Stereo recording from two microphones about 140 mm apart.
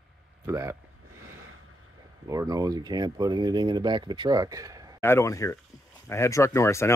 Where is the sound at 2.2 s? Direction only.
25° right (ahead or behind).